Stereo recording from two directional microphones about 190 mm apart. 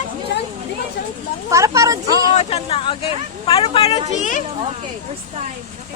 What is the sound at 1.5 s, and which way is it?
Speech, 15° right (ahead or behind).